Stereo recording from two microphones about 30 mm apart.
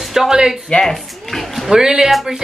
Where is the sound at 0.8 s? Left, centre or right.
Centre.